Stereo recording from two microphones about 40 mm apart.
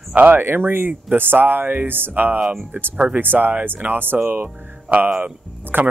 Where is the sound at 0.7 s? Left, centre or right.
Right.